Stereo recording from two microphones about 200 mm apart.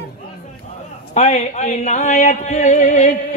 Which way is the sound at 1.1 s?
35° left (ahead or behind).